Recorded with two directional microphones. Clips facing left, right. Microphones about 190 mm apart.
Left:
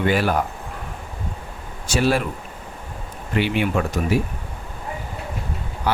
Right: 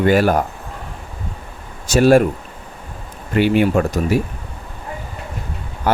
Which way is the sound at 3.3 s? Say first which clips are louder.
Right 6 dB; 45° right (ahead or behind).